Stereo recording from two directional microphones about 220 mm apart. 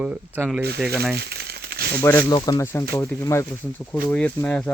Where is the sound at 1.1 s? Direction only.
45° right (ahead or behind).